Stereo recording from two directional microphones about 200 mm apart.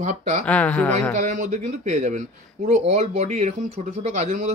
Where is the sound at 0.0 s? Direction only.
35° right (ahead or behind).